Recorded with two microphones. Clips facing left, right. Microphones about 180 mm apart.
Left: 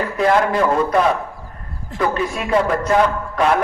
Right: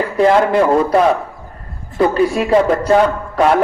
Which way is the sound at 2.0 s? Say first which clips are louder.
Right 7 dB; 30° right (ahead or behind).